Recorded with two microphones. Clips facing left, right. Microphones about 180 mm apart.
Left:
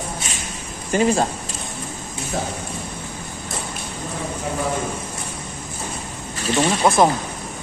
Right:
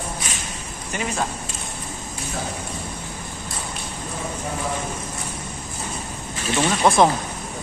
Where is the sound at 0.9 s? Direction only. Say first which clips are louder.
Left 10 dB; 35° left (ahead or behind).